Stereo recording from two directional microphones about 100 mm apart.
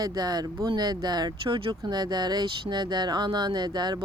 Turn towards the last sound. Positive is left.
turn(degrees=-45)  # may be behind; listen again after turning